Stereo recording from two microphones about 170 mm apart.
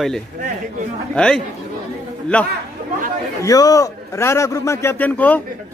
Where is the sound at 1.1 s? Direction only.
5° left (ahead or behind).